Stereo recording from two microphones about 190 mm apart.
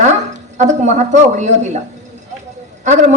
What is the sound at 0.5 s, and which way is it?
Speech, 40° right (ahead or behind).